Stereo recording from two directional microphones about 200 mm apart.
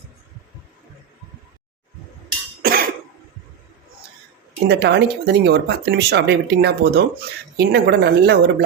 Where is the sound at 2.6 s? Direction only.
50° right (ahead or behind).